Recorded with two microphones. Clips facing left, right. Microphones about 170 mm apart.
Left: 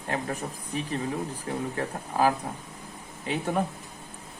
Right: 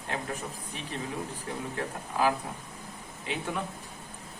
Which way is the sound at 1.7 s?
40° left (ahead or behind).